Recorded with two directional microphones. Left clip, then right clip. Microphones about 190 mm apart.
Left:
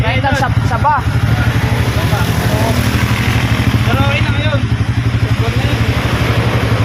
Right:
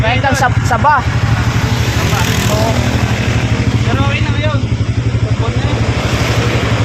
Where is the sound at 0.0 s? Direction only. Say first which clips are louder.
Right 2 dB; 45° right (ahead or behind).